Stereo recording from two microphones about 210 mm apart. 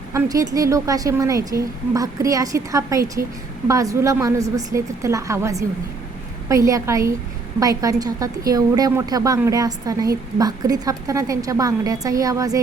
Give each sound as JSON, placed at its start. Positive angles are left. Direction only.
{"t": 0.1, "sound": "speech", "side_deg": -15}